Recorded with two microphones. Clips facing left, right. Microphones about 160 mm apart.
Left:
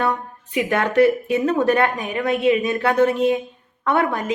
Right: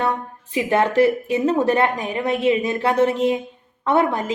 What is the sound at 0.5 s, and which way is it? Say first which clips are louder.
Speech: right 1 dB; 25° right (ahead or behind).